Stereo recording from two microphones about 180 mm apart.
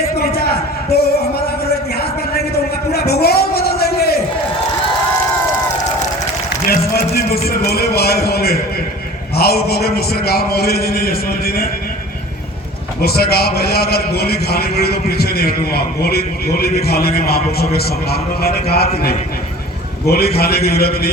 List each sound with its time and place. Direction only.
0.2 s a sound: 60° left (ahead or behind)
2.9 s a sound: 60° left (ahead or behind)
6.7 s music: 60° left (ahead or behind)
9.3 s a man's voice: 60° left (ahead or behind)
13.0 s a man's voice: 60° left (ahead or behind)
20.1 s a man's voice: 60° left (ahead or behind)